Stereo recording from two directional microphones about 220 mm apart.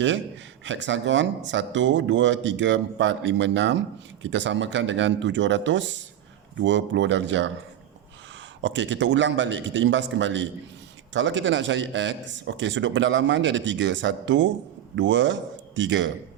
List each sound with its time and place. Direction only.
0.6 s speech: 55° right (ahead or behind)
8.6 s speech: 55° right (ahead or behind)